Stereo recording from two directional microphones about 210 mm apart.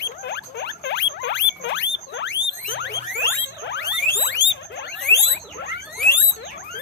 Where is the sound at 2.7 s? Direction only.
55° left (ahead or behind).